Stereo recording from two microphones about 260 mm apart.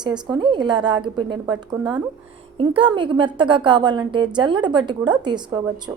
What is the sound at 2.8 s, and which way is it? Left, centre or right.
A woman's voice, centre.